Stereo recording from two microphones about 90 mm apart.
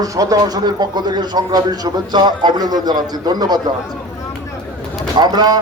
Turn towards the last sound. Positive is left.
turn(degrees=-50)  # may be behind; listen again after turning